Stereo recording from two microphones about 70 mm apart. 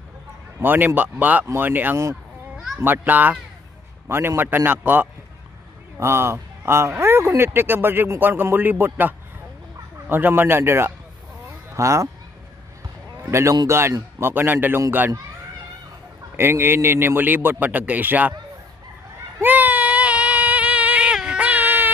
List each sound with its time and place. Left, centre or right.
0.6 s a man's voice: right
2.5 s a sound: centre
2.8 s a man's voice: right
4.4 s a man's voice: right
5.9 s speech: right
11.7 s speech: right
13.2 s speech: right
14.2 s a man's voice: right
16.3 s a man's voice: right
19.4 s child singing: right